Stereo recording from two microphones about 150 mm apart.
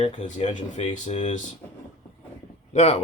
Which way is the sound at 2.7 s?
45° left (ahead or behind).